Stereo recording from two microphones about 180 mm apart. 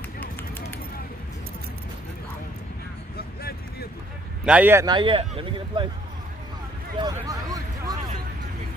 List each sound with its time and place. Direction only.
0.2 s run: 10° left (ahead or behind)
4.5 s speech: 10° right (ahead or behind)
4.8 s speech: 25° right (ahead or behind)
7.0 s a sound: 20° right (ahead or behind)